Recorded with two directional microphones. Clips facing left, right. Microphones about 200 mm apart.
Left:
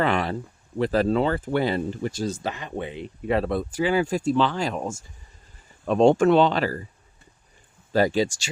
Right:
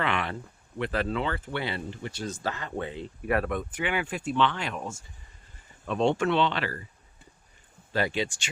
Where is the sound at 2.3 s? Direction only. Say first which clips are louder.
Left 3 dB; 20° left (ahead or behind); by 6.9 s 40° left (ahead or behind).